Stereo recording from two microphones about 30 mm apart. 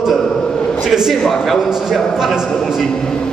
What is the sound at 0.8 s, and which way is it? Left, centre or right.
Speech, centre.